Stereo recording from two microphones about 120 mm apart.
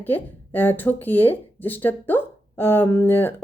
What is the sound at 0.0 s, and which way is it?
A woman's voice, 15° left (ahead or behind).